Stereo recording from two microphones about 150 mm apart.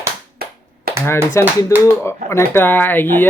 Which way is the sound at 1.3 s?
20° left (ahead or behind).